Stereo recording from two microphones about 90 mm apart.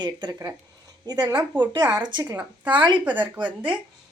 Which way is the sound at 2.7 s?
60° right (ahead or behind).